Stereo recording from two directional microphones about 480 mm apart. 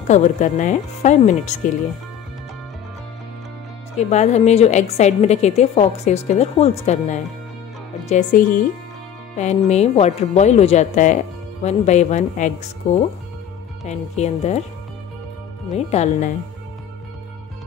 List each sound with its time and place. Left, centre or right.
0.1 s a woman's voice: centre
4.1 s a woman's voice: centre
15.7 s a woman's voice: centre